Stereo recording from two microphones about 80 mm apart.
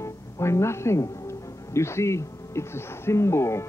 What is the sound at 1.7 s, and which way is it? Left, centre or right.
Speech, left.